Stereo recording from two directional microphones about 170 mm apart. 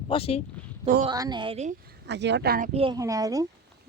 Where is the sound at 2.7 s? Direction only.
35° right (ahead or behind).